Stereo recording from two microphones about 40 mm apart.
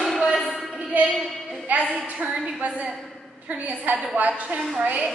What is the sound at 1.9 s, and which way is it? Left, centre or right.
A woman's voice, right.